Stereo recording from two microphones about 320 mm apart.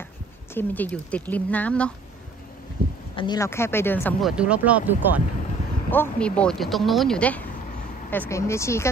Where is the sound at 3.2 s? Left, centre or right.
Centre.